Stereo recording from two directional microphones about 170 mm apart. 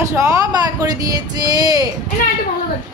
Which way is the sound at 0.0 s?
20° right (ahead or behind).